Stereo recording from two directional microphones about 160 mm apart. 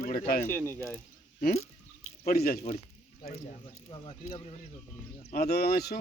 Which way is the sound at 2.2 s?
75° left (ahead or behind).